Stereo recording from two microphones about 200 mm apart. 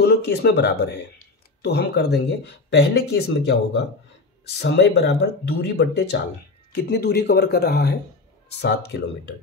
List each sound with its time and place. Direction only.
0.0 s speech: 55° left (ahead or behind)